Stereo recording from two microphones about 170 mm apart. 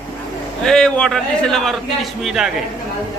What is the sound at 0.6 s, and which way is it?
Speech, 5° left (ahead or behind).